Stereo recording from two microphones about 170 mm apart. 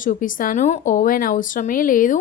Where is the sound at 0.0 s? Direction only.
50° left (ahead or behind).